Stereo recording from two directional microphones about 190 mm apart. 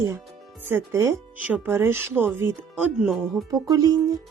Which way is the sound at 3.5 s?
20° right (ahead or behind).